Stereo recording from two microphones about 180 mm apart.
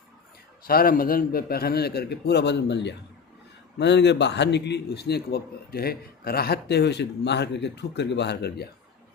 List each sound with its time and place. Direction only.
0.6 s a man's voice: 55° left (ahead or behind)